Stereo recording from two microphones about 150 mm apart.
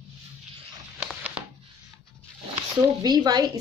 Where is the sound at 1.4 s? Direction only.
5° right (ahead or behind).